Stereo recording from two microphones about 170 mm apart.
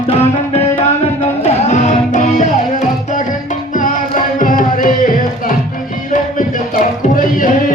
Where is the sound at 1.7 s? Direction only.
45° left (ahead or behind).